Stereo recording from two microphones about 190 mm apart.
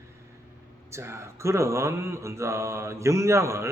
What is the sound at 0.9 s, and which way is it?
A man's voice, 15° right (ahead or behind).